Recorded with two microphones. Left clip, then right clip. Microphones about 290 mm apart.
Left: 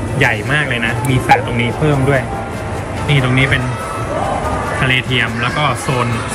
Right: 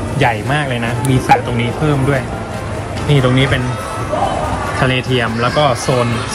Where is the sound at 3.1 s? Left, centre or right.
Right.